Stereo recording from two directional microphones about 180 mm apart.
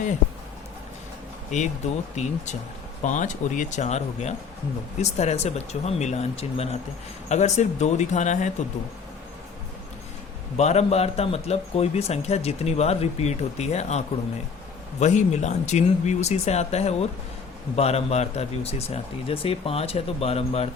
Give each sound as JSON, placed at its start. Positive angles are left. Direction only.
{"t": 1.5, "sound": "a man's voice", "side_deg": 40}
{"t": 10.6, "sound": "a man's voice", "side_deg": 35}